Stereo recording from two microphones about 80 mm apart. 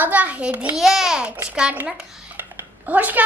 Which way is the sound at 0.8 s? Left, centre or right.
Centre.